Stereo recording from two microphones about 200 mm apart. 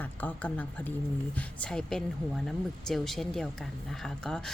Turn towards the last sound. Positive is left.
turn(degrees=5)  # may be behind; listen again after turning